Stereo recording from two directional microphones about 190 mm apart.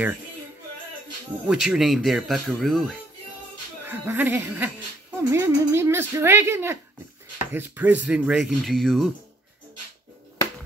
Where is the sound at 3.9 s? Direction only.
10° right (ahead or behind).